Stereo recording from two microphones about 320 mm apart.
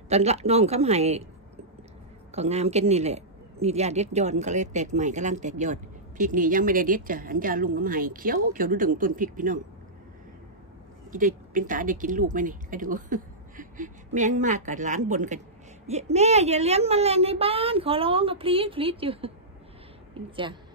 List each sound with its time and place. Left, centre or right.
0.1 s a man's voice: centre
2.3 s a man's voice: centre
11.1 s a man's voice: right